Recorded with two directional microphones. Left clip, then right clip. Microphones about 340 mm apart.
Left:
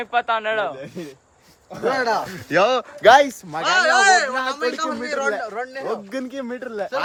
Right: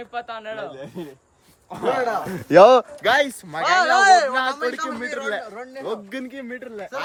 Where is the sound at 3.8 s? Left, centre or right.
Centre.